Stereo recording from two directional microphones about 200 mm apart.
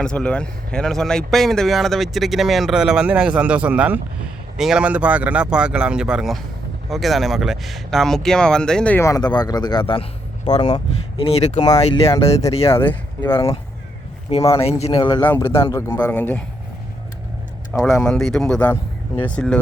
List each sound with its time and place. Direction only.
0.0 s a man's voice: 5° left (ahead or behind); by 12.7 s 30° left (ahead or behind)
12.7 s speech: 10° left (ahead or behind)
14.6 s a man's voice: 30° left (ahead or behind)
15.2 s a man's voice: 10° left (ahead or behind)
17.8 s speech: centre (ahead or behind)